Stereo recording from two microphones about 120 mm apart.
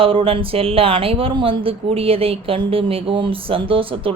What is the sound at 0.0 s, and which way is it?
Speech, 50° right (ahead or behind).